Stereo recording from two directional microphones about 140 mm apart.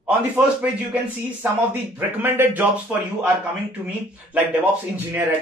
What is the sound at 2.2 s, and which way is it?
Speech, 15° right (ahead or behind).